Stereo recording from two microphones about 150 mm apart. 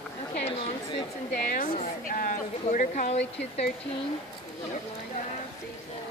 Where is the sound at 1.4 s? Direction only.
65° left (ahead or behind); by 3.7 s 45° left (ahead or behind).